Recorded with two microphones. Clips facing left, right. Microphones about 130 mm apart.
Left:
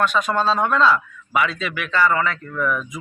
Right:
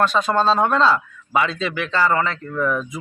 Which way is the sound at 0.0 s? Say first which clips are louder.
Right 2 dB; 30° right (ahead or behind).